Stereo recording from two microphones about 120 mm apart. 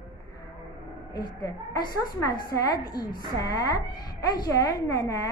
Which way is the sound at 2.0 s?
30° left (ahead or behind).